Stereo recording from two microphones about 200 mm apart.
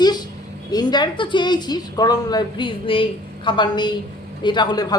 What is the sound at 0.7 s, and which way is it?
A woman's voice, 20° left (ahead or behind).